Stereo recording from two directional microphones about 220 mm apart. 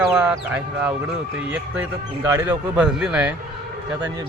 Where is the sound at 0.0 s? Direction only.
5° right (ahead or behind).